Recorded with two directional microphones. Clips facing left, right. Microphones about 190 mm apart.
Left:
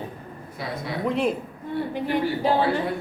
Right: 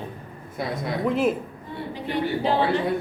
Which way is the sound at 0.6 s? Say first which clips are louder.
Right 4 dB; 50° right (ahead or behind).